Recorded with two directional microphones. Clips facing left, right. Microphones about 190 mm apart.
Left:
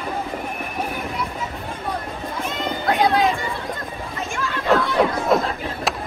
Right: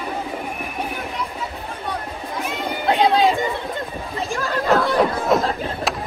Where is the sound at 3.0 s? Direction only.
30° right (ahead or behind).